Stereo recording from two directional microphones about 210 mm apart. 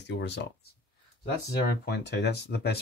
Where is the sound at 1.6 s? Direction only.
50° left (ahead or behind).